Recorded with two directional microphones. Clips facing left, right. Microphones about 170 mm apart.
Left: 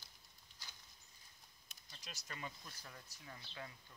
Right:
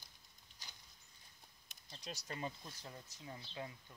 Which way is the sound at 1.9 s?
30° right (ahead or behind).